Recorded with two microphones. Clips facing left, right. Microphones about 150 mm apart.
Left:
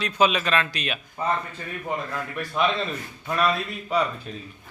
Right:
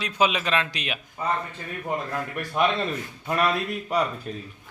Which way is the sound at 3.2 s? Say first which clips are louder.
Even; 15° right (ahead or behind).